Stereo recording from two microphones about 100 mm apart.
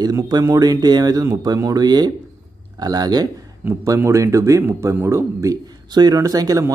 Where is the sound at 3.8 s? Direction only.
30° right (ahead or behind).